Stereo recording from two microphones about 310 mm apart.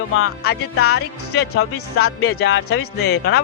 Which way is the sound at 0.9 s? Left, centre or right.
Left.